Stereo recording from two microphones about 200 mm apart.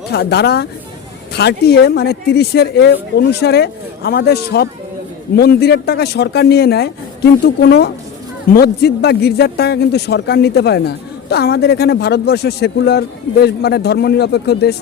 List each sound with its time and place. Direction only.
0.1 s speech: 55° left (ahead or behind)